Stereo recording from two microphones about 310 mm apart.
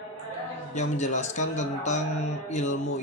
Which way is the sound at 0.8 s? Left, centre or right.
Left.